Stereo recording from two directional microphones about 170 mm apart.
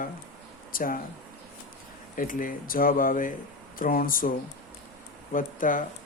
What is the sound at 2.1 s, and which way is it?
Speech, 55° left (ahead or behind).